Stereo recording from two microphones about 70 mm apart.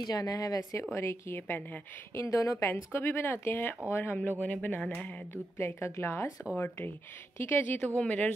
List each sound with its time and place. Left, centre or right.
0.0 s speech: left
0.9 s speech: left
2.1 s speech: left
2.7 s speech: left
5.3 s speech: left